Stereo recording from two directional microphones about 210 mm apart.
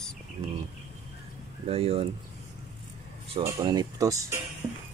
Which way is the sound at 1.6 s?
30° right (ahead or behind).